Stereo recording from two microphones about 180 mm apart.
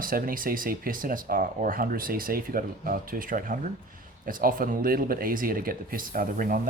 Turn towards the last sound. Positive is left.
turn(degrees=-50)  # may be behind; listen again after turning